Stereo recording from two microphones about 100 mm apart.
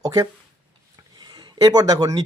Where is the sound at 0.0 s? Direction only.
35° right (ahead or behind).